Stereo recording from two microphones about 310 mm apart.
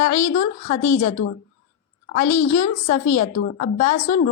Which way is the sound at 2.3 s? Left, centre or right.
Left.